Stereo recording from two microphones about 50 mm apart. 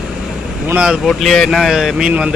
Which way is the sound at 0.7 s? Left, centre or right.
Right.